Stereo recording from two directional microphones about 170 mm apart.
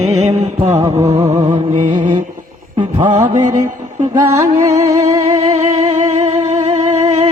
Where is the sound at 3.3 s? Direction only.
45° right (ahead or behind).